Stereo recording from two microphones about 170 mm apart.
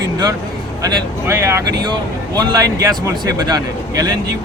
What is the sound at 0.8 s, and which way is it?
Speech, 15° right (ahead or behind).